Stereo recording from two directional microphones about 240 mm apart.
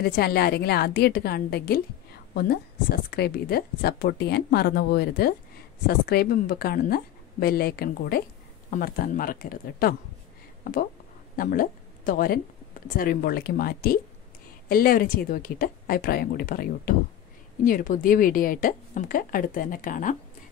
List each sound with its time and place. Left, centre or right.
0.0 s a woman's voice: left